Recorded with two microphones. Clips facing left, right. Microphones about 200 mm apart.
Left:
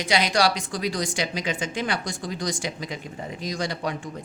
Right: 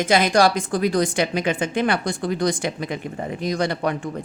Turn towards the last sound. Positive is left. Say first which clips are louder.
# right 6 dB
turn(degrees=-60)  # may be behind; listen again after turning